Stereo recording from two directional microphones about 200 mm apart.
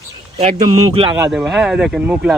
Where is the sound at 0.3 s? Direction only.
30° right (ahead or behind).